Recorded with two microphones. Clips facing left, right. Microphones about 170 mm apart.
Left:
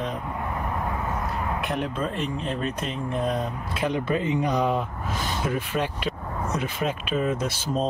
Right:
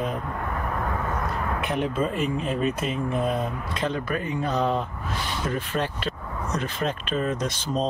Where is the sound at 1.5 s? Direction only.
Centre (ahead or behind).